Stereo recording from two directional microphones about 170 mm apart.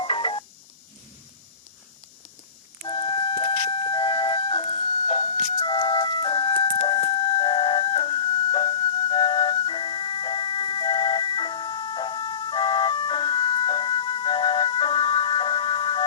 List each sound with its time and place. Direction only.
0.0 s music: 30° left (ahead or behind)
2.8 s flute: 30° left (ahead or behind)